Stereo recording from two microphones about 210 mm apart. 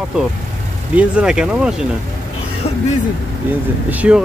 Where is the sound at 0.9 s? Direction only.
5° right (ahead or behind).